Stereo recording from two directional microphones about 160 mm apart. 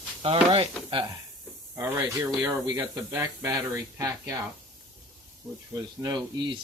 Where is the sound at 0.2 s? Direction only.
35° right (ahead or behind).